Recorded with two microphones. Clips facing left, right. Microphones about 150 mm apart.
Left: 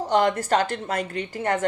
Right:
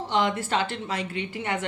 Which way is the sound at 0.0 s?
40° left (ahead or behind).